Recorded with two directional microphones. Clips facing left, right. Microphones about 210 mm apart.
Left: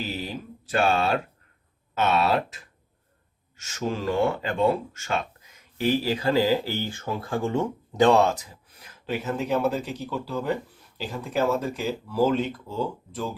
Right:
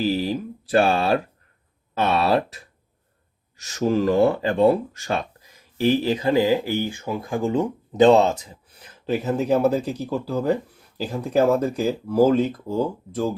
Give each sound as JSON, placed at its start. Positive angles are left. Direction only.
{"t": 0.3, "sound": "speech", "side_deg": -35}
{"t": 3.6, "sound": "speech", "side_deg": -35}